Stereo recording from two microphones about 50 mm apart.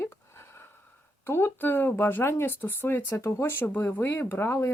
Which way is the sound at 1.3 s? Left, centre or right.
Left.